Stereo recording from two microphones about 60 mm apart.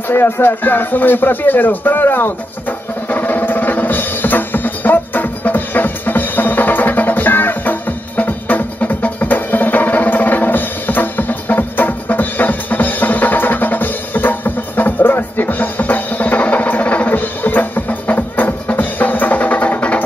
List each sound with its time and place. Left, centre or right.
0.1 s speech: left
3.1 s music: left